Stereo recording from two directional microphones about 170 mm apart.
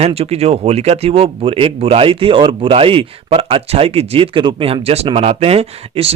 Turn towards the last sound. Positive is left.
turn(degrees=-35)  # may be behind; listen again after turning